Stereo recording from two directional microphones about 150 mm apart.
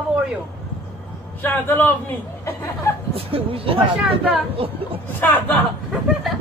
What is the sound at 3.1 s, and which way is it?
Speech, 40° right (ahead or behind).